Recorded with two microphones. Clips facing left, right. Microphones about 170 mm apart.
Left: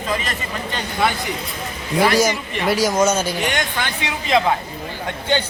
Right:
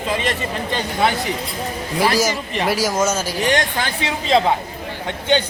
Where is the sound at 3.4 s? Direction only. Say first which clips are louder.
Right 3 dB; 35° right (ahead or behind).